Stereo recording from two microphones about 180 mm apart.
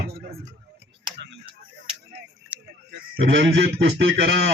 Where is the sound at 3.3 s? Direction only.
75° right (ahead or behind).